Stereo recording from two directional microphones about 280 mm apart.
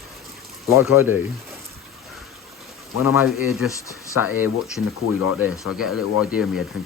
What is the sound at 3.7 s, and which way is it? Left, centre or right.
Speech, centre.